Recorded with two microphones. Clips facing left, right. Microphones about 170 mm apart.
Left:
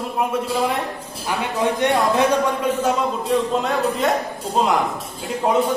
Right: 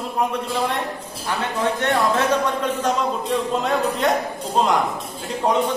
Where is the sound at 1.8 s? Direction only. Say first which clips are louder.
Left 3 dB; 10° left (ahead or behind).